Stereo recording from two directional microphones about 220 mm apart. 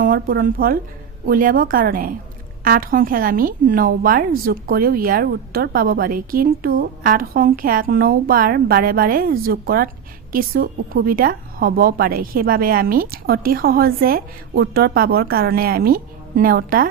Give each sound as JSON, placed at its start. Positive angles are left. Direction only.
{"t": 0.0, "sound": "a woman's voice", "side_deg": -40}